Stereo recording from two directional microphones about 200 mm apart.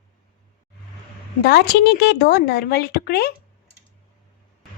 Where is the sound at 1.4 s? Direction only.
55° left (ahead or behind).